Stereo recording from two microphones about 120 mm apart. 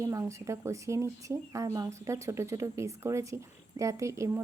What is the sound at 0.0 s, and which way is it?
Speech, 25° right (ahead or behind).